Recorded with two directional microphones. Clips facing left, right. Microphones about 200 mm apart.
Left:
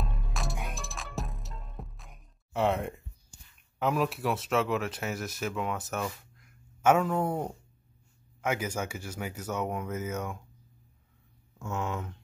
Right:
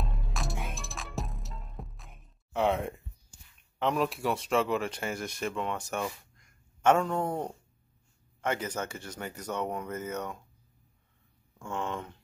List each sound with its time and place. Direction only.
0.0 s music: centre (ahead or behind)
3.8 s speech: 5° left (ahead or behind)
11.5 s speech: 5° left (ahead or behind)